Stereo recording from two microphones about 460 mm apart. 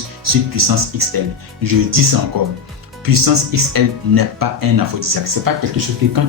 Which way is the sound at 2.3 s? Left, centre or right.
Right.